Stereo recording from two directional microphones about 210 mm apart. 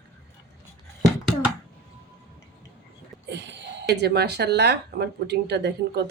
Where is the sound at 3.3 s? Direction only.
60° right (ahead or behind).